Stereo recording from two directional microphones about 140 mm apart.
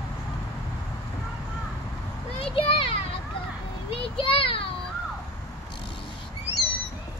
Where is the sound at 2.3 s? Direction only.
40° left (ahead or behind).